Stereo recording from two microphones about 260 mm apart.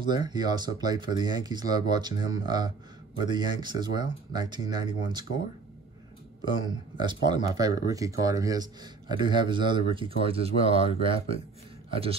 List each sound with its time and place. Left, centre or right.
0.0 s speech: centre
7.0 s a man's voice: centre